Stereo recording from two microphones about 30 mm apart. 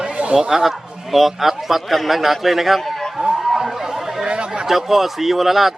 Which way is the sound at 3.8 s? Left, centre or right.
Centre.